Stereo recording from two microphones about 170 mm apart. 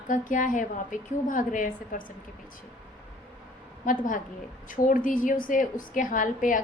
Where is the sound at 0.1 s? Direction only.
50° left (ahead or behind).